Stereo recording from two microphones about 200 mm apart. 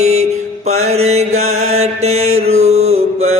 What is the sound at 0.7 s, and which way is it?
Mantra, 35° right (ahead or behind).